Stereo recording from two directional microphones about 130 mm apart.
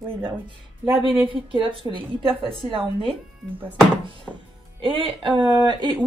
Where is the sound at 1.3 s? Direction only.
40° right (ahead or behind).